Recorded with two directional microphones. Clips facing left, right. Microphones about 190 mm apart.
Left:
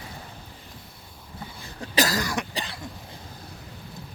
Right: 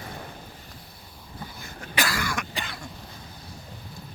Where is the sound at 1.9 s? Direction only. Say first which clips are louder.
Left 4 dB; 40° left (ahead or behind).